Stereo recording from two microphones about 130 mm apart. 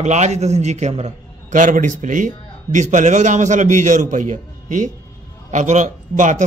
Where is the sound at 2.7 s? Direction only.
70° right (ahead or behind).